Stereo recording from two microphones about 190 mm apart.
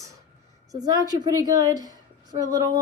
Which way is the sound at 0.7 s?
20° right (ahead or behind).